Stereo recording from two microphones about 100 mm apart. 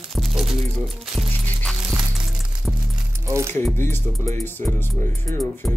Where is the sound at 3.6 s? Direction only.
25° left (ahead or behind).